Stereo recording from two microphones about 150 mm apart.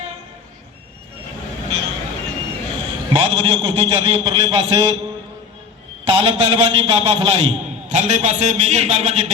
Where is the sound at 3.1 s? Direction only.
35° right (ahead or behind).